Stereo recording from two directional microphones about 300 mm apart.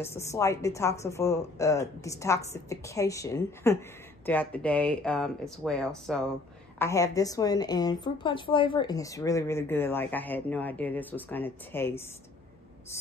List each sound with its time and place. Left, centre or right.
0.0 s a woman's voice: centre